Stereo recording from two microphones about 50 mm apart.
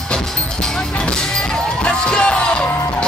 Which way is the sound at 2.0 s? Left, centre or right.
Centre.